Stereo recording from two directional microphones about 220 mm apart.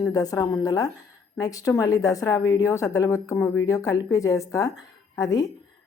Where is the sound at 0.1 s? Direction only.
15° left (ahead or behind).